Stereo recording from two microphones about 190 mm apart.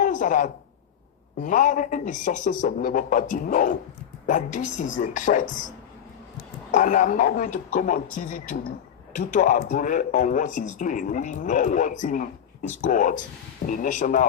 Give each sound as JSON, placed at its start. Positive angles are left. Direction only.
{"t": 0.0, "sound": "a sound", "side_deg": 45}
{"t": 1.4, "sound": "speech", "side_deg": 40}
{"t": 6.7, "sound": "speech", "side_deg": 40}